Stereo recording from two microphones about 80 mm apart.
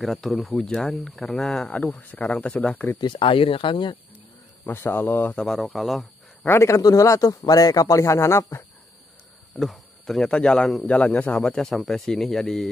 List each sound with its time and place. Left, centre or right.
0.0 s a man's voice: centre
3.0 s speech: left
4.6 s speech: left
5.3 s speech: centre
6.4 s speech: left
6.8 s speech: left
9.6 s cricket: centre
10.2 s a man's voice: centre
10.9 s speech: centre